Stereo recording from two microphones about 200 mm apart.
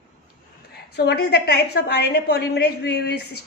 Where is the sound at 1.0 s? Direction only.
55° left (ahead or behind).